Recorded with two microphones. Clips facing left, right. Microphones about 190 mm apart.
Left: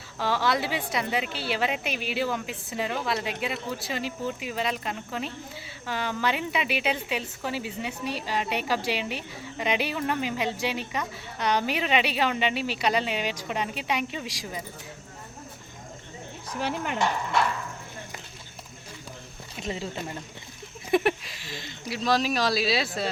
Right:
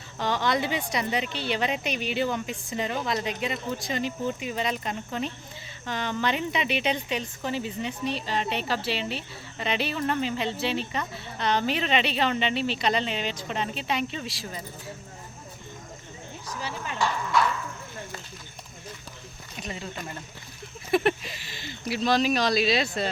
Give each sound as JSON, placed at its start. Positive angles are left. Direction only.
{"t": 0.2, "sound": "a woman's voice", "side_deg": 5}
{"t": 16.6, "sound": "speech", "side_deg": 65}
{"t": 19.6, "sound": "speech", "side_deg": 25}
{"t": 20.9, "sound": "a woman's voice", "side_deg": 10}